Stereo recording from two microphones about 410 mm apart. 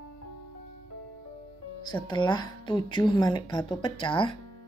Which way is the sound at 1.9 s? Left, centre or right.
Centre.